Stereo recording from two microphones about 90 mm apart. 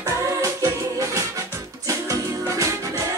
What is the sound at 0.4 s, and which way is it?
Music, 40° right (ahead or behind).